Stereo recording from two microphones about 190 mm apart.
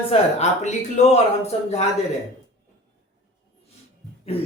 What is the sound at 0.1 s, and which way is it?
Speech, 35° left (ahead or behind).